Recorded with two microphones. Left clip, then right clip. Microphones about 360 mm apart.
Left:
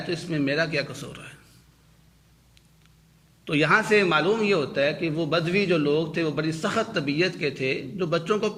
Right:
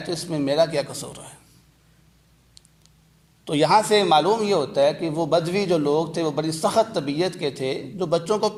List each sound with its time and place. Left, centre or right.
0.1 s a man's voice: centre
3.4 s a man's voice: centre